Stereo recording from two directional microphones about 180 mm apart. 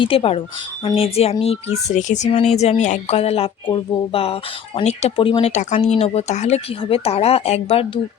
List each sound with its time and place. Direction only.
0.0 s speech: 30° left (ahead or behind)
5.5 s speech: 40° left (ahead or behind)